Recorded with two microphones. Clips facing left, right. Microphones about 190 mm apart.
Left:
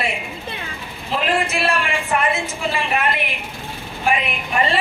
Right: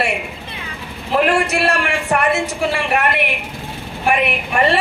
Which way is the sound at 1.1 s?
50° right (ahead or behind).